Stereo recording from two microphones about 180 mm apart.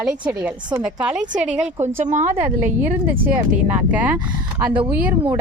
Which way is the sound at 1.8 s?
40° right (ahead or behind).